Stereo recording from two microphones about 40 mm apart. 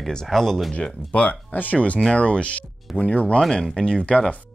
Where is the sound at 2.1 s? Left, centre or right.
Left.